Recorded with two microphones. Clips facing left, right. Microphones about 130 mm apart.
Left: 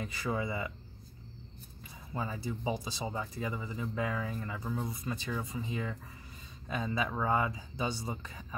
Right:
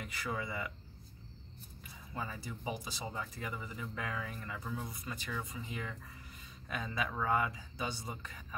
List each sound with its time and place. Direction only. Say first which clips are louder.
0.0 s speech: left 5 dB; 25° left (ahead or behind)
2.1 s speech: left 5 dB; 20° left (ahead or behind)